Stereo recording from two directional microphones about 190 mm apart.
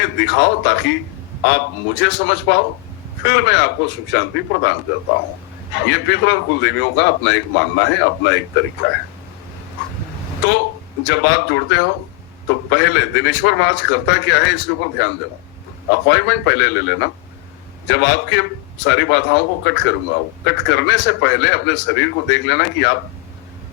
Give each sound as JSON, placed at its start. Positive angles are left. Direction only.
{"t": 0.0, "sound": "a man's voice", "side_deg": 70}
{"t": 10.4, "sound": "a man's voice", "side_deg": 70}